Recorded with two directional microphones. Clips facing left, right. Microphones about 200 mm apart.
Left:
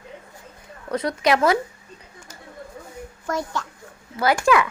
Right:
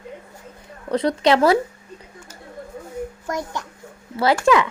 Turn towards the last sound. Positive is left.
turn(degrees=-20)  # may be behind; listen again after turning